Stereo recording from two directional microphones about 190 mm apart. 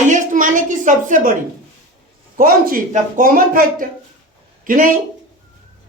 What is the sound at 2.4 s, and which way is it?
Speech, 45° right (ahead or behind).